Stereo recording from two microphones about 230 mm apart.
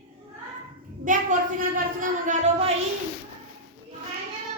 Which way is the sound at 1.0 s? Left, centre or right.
Right.